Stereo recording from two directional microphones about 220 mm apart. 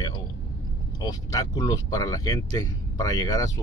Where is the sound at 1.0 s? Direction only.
15° left (ahead or behind).